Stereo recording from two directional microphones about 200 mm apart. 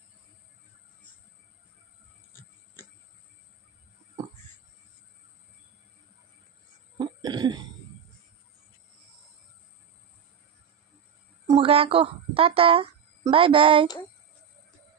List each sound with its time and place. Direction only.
7.0 s cough: 20° right (ahead or behind)
11.4 s a woman's voice: 25° right (ahead or behind)